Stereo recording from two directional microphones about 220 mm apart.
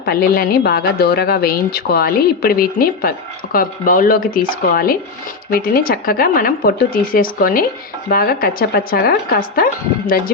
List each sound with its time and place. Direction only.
0.0 s speech: 45° left (ahead or behind)